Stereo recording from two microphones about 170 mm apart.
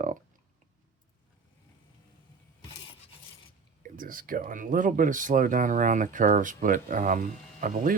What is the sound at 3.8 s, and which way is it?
Speech, 55° right (ahead or behind).